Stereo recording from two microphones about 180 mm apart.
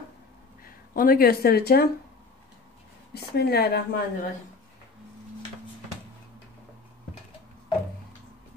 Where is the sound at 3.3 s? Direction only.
65° left (ahead or behind).